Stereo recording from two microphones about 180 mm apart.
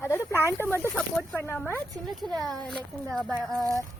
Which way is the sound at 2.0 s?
Centre (ahead or behind).